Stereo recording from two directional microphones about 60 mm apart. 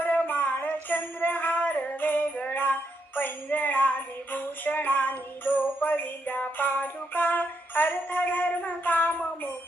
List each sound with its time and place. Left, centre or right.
0.0 s music: left